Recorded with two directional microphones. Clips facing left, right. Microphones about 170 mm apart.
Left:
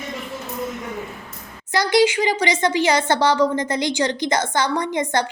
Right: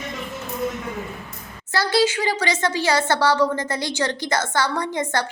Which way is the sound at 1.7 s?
15° left (ahead or behind).